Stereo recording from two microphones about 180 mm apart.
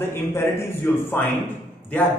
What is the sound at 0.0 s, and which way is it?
A man's voice, 15° left (ahead or behind).